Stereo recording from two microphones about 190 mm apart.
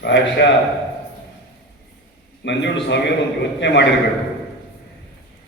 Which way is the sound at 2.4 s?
70° left (ahead or behind).